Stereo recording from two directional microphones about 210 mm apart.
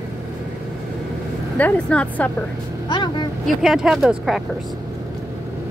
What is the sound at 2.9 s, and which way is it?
Speech, 20° left (ahead or behind).